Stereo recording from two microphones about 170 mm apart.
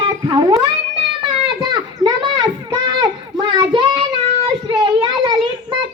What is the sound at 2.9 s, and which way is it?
Children playing, 25° right (ahead or behind).